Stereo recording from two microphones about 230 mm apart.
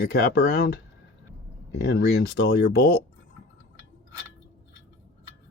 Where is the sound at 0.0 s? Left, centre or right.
Left.